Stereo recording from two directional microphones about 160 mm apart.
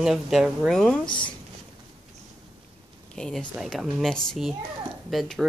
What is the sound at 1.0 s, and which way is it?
Speech, 30° left (ahead or behind).